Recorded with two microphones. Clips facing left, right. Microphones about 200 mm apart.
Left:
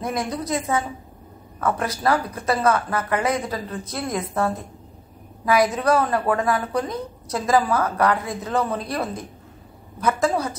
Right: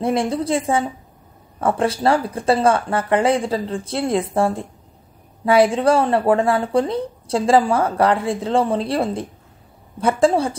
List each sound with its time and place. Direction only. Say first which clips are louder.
0.0 s a woman's voice: right 6 dB; 30° right (ahead or behind)